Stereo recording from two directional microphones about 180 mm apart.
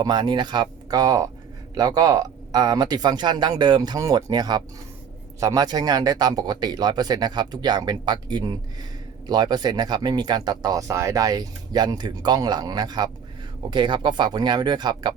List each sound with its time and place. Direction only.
0.0 s speech: 25° right (ahead or behind)